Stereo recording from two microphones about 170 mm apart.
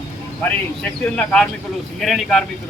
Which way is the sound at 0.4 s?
5° left (ahead or behind).